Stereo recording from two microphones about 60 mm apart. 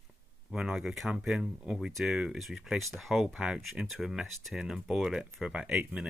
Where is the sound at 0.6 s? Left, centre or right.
Centre.